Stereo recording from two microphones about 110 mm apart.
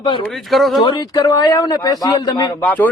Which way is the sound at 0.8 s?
40° left (ahead or behind).